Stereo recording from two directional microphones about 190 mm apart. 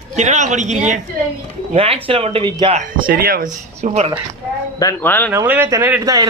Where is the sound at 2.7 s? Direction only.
50° right (ahead or behind).